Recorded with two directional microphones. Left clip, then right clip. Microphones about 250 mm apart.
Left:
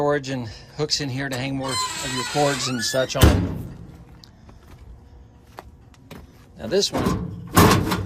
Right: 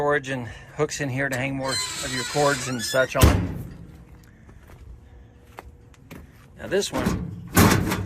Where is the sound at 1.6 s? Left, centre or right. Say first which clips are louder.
Left 2 dB; centre.